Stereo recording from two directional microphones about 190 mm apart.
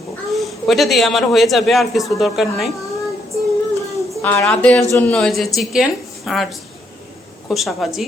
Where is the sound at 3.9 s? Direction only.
15° right (ahead or behind).